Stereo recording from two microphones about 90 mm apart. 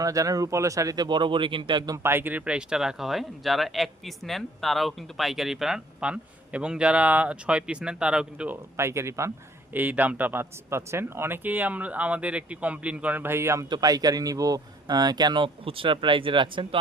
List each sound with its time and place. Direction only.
0.0 s speech: 40° right (ahead or behind)
1.0 s speech: 60° right (ahead or behind)
2.0 s speech: 25° right (ahead or behind)
8.7 s speech: 30° right (ahead or behind)
9.7 s a man's voice: 20° right (ahead or behind)
13.7 s speech: 50° right (ahead or behind)
15.6 s speech: 85° right; by 16.6 s 65° right (ahead or behind)